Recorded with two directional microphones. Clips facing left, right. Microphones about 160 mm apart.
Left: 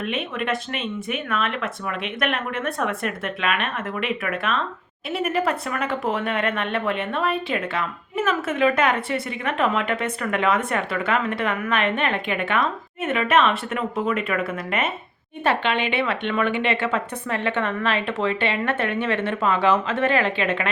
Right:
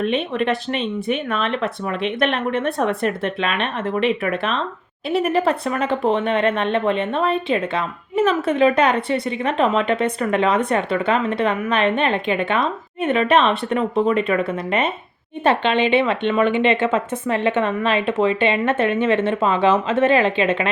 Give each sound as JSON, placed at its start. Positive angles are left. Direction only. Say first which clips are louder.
{"t": 0.0, "sound": "a woman's voice", "louder": "right 6 dB", "side_deg": -35}